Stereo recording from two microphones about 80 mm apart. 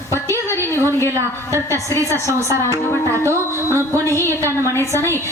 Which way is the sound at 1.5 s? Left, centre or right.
Right.